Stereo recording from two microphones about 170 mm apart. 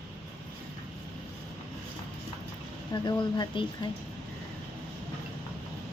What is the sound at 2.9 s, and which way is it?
Speech, 25° left (ahead or behind).